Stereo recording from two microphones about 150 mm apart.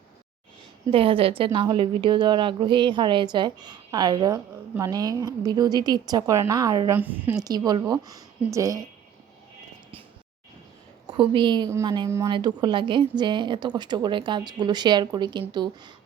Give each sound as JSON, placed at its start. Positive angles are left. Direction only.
{"t": 0.9, "sound": "a woman's voice", "side_deg": -35}
{"t": 6.9, "sound": "a woman's voice", "side_deg": -10}
{"t": 7.4, "sound": "speech", "side_deg": -25}
{"t": 11.0, "sound": "a woman's voice", "side_deg": -35}